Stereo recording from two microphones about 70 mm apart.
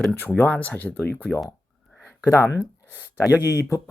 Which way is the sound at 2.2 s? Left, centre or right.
Left.